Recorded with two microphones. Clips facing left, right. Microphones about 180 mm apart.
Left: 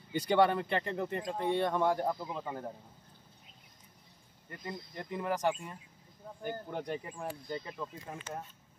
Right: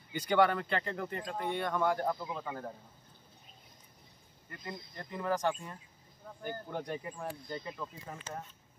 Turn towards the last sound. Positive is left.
turn(degrees=5)  # may be behind; listen again after turning